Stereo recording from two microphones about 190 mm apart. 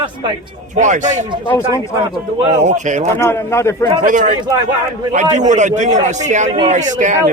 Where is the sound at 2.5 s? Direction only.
40° right (ahead or behind).